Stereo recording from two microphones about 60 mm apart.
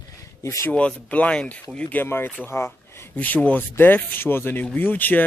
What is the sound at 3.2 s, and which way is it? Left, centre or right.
Speech, left.